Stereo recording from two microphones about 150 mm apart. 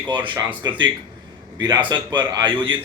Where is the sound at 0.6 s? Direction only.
30° right (ahead or behind).